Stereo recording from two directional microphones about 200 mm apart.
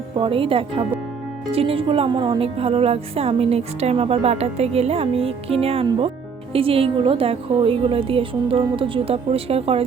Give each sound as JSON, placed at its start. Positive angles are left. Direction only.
{"t": 0.2, "sound": "speech", "side_deg": -25}